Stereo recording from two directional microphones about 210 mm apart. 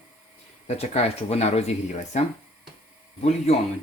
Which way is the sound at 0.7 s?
30° left (ahead or behind).